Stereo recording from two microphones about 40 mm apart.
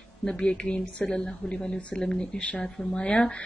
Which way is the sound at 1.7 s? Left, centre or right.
Left.